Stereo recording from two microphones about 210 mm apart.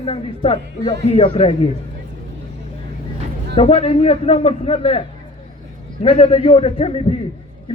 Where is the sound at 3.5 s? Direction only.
30° left (ahead or behind).